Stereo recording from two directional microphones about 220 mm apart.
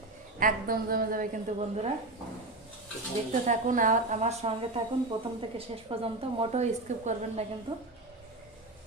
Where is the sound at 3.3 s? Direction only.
35° right (ahead or behind).